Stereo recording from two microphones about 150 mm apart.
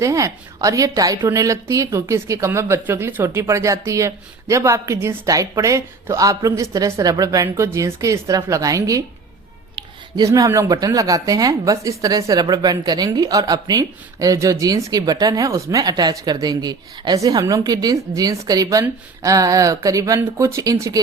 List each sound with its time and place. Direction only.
0.0 s a woman's voice: 20° right (ahead or behind)
10.2 s a woman's voice: 25° right (ahead or behind)